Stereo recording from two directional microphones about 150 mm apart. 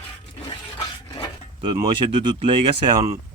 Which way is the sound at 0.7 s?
25° left (ahead or behind).